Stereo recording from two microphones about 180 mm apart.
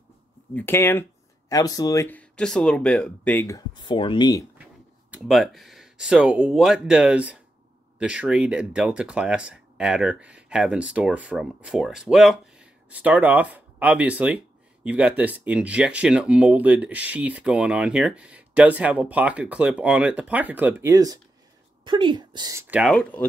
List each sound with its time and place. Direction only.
0.6 s speech: 10° left (ahead or behind)
5.1 s speech: centre (ahead or behind)
22.8 s speech: centre (ahead or behind)